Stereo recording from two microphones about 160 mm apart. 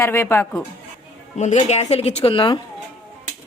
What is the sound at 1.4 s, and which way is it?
Speech, 50° left (ahead or behind).